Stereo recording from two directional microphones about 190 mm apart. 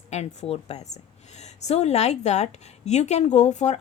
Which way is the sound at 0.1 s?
35° left (ahead or behind).